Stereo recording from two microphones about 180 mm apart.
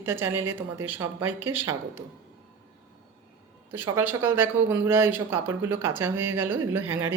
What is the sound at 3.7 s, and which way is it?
Speech, 10° right (ahead or behind).